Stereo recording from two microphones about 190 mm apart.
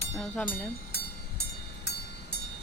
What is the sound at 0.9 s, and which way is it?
Train, 60° left (ahead or behind).